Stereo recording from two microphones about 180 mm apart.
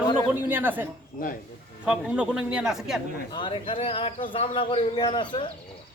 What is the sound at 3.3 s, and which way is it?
Speech, 30° left (ahead or behind).